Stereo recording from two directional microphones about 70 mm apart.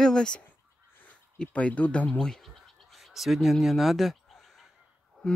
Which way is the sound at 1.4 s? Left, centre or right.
Centre.